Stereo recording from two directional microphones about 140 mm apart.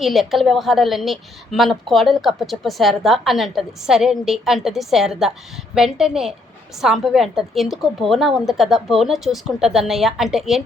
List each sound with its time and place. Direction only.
0.0 s a woman's voice: centre (ahead or behind)